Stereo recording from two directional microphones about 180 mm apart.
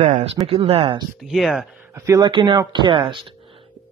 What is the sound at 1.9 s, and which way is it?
Speech, 15° right (ahead or behind).